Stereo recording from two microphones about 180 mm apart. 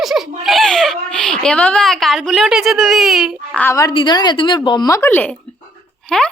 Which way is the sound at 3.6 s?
15° left (ahead or behind).